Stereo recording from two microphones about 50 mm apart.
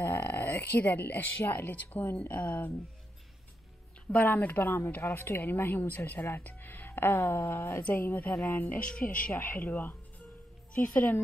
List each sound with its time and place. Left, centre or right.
0.0 s a sound: left
0.6 s speech: left
4.1 s speech: left
5.0 s speech: left
7.9 s speech: left